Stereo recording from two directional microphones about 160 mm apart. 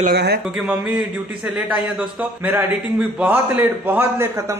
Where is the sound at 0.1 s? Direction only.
90° right.